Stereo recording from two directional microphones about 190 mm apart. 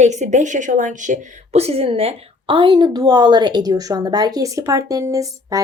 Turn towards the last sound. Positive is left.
turn(degrees=-15)  # may be behind; listen again after turning